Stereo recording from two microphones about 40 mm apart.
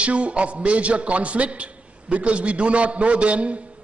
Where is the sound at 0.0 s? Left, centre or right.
Right.